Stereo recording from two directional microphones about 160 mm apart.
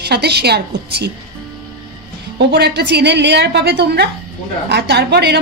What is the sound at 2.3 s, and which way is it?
A woman's voice, 90° right.